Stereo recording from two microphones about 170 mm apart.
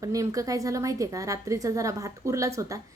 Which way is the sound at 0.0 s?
20° right (ahead or behind).